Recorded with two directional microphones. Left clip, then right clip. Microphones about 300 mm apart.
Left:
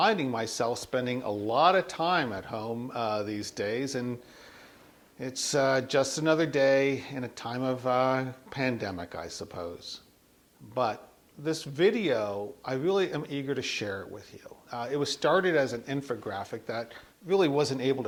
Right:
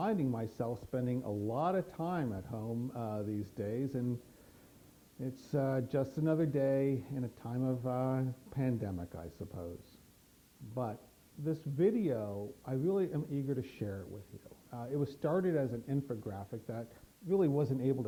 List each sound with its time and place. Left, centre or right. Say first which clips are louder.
0.0 s speech: left 10 dB; centre
2.6 s a sound: left 6 dB; left
2.9 s speech: left 13 dB; centre
5.2 s speech: left 10 dB; centre
10.8 s speech: left 11 dB; centre